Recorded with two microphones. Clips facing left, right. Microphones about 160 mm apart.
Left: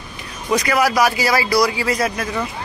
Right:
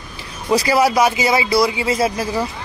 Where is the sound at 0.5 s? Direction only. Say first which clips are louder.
Right 2 dB; 30° right (ahead or behind).